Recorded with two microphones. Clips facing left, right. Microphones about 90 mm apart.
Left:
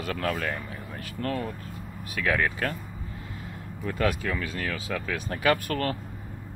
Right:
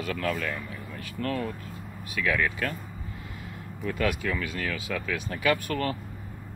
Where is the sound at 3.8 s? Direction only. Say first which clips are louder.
Left 1 dB; 30° left (ahead or behind).